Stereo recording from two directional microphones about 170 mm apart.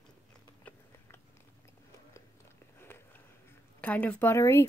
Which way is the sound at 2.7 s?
15° left (ahead or behind).